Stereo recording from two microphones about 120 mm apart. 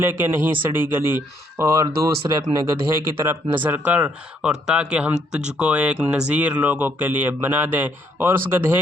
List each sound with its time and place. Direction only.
0.0 s speech: 15° right (ahead or behind)